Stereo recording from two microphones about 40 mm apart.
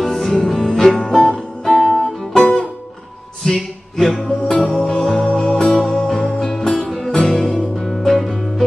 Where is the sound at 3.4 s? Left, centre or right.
Centre.